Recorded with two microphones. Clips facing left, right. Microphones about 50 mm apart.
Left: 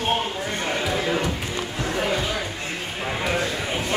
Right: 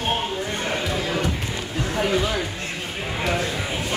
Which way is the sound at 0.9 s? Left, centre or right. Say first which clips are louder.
Left 1 dB; centre.